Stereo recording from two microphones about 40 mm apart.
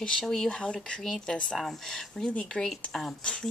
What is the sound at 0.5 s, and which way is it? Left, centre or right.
Speech, centre.